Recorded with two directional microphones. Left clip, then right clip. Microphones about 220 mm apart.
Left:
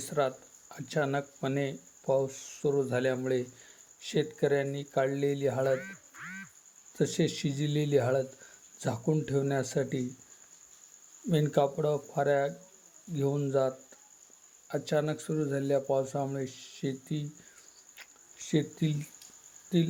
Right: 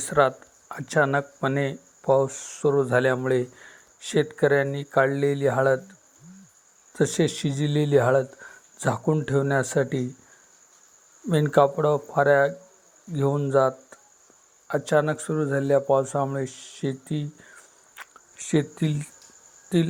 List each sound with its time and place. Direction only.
0.0 s speech: 10° right (ahead or behind)
6.9 s speech: 5° right (ahead or behind)
11.3 s speech: 10° right (ahead or behind)
17.9 s a sound: 5° right (ahead or behind)